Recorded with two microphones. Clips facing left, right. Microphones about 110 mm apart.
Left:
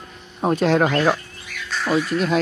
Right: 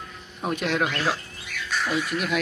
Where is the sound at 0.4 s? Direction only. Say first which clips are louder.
Left 8 dB; 35° left (ahead or behind).